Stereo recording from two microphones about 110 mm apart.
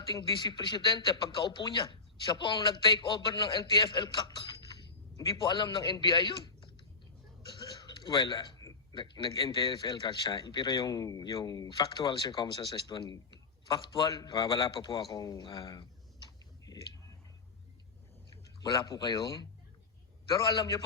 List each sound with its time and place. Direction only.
0.1 s speech: 45° left (ahead or behind)
7.6 s a man's voice: 40° left (ahead or behind)
16.2 s chewing: 35° left (ahead or behind)
18.3 s a man's voice: 40° left (ahead or behind)